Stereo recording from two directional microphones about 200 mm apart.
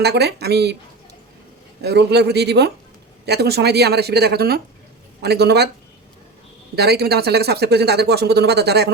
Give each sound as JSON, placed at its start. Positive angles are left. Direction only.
{"t": 0.0, "sound": "speech", "side_deg": -55}
{"t": 1.8, "sound": "speech", "side_deg": -55}
{"t": 6.7, "sound": "speech", "side_deg": -55}